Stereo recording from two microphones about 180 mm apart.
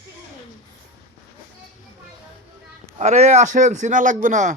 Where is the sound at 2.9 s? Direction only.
40° right (ahead or behind).